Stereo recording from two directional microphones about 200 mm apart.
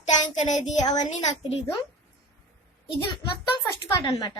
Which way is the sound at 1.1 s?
35° left (ahead or behind).